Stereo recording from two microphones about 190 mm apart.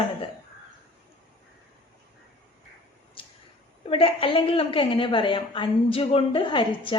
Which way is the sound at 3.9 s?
30° left (ahead or behind).